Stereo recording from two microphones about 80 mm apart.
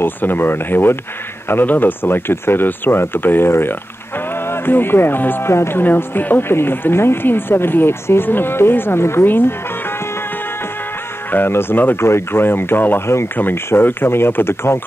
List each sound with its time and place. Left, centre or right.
0.0 s speech: left
11.3 s speech: left